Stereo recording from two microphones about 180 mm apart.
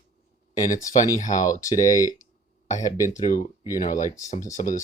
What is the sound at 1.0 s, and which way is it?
Speech, 45° left (ahead or behind).